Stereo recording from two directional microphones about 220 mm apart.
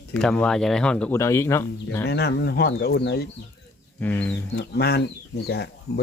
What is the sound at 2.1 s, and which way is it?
Speech, 50° left (ahead or behind).